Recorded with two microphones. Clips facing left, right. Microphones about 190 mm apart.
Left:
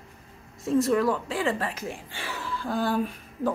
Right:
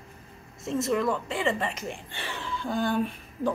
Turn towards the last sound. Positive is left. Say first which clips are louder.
# left 1 dB
turn(degrees=5)  # may be behind; listen again after turning